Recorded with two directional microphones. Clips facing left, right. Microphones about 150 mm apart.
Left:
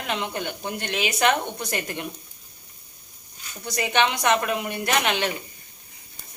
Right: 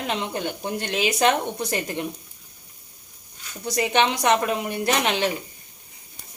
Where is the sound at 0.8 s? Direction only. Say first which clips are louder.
Right 2 dB; 35° right (ahead or behind).